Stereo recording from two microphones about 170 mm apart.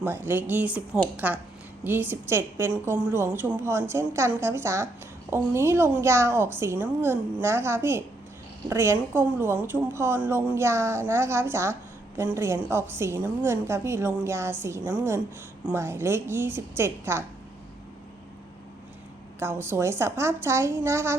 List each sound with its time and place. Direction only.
0.0 s a woman's voice: 15° right (ahead or behind)
19.4 s a woman's voice: 15° right (ahead or behind)